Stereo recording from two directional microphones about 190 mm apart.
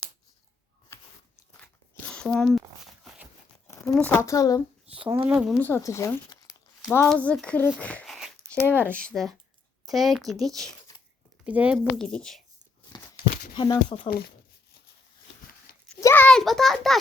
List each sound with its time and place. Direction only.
0.9 s biting: 15° left (ahead or behind)
1.6 s a sound: 5° left (ahead or behind)
3.8 s speech: 5° left (ahead or behind)
5.0 s speech: 25° right (ahead or behind)
5.3 s a woman's voice: 5° right (ahead or behind)
5.5 s a woman's voice: 10° left (ahead or behind)
10.9 s a sound: 20° left (ahead or behind)
11.4 s speech: 5° right (ahead or behind)
11.9 s a woman's voice: 5° left (ahead or behind)
13.6 s speech: 25° left (ahead or behind)
16.0 s a sound: 10° left (ahead or behind)